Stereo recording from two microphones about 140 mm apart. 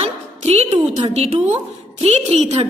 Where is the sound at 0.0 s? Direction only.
50° right (ahead or behind).